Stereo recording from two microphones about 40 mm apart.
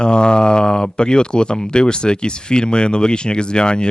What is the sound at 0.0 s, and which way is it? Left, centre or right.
Speech, left.